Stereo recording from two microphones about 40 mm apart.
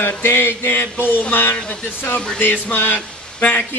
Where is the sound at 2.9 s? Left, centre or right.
Left.